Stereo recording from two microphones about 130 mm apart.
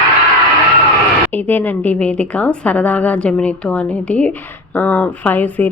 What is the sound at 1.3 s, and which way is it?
A woman's voice, 15° left (ahead or behind).